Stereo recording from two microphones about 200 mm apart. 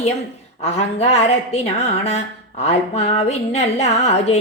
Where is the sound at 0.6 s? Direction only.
35° left (ahead or behind).